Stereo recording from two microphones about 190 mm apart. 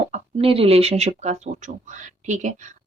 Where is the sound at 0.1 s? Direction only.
30° right (ahead or behind).